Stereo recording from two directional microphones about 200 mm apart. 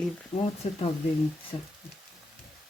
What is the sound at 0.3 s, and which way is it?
Speech, 30° left (ahead or behind).